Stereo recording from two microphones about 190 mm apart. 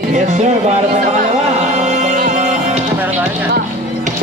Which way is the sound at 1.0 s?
40° right (ahead or behind).